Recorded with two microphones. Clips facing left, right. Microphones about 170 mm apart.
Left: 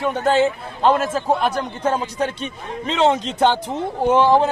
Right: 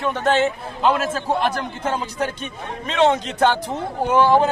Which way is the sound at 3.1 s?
20° left (ahead or behind).